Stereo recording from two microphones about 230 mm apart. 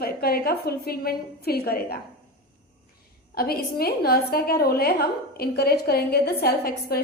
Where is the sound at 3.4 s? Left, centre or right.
Left.